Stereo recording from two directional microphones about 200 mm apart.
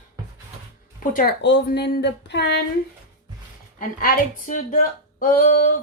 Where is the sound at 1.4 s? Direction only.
60° left (ahead or behind).